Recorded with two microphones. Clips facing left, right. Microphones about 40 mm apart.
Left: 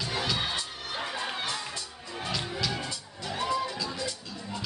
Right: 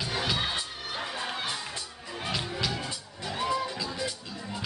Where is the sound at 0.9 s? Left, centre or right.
Centre.